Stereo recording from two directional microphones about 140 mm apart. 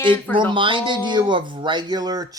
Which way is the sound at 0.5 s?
35° right (ahead or behind).